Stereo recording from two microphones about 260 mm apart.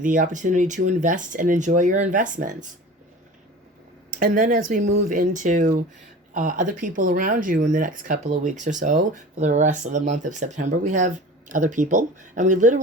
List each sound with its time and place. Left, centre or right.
0.0 s speech: right
4.1 s speech: right